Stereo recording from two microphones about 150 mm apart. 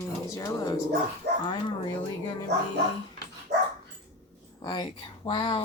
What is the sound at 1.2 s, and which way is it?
Speech, 90° right.